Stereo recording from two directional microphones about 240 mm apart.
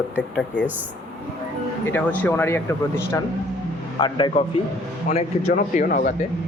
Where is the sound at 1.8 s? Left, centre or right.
Centre.